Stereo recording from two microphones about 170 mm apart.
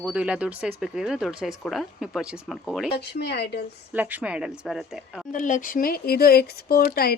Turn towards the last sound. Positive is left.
turn(degrees=60)  # may be behind; listen again after turning